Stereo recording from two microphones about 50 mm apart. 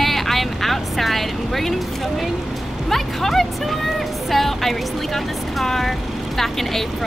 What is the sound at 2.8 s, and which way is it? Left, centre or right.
Music, centre.